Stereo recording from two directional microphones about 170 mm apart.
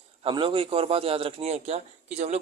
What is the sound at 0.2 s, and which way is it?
Speech, 30° right (ahead or behind).